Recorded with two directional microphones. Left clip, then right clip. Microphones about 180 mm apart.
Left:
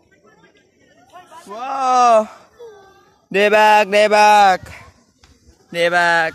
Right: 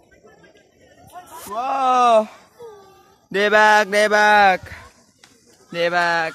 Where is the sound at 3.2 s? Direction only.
25° left (ahead or behind).